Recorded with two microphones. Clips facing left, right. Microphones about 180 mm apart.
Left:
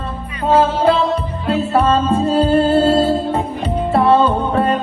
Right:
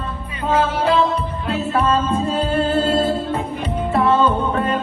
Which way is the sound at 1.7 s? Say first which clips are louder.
Left 3 dB; 30° left (ahead or behind).